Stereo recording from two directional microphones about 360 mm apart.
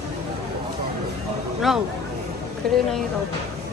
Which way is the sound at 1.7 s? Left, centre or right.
Centre.